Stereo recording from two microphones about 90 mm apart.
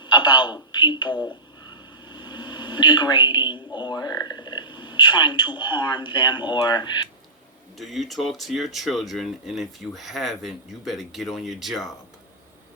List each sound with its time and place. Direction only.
0.0 s a woman's voice: 55° left (ahead or behind)
7.8 s speech: centre (ahead or behind)